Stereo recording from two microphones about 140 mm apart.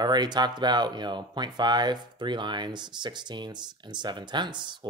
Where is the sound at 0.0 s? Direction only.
30° right (ahead or behind).